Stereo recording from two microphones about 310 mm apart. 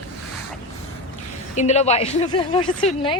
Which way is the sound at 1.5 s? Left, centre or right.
Left.